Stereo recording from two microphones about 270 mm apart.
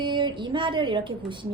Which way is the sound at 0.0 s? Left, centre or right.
Centre.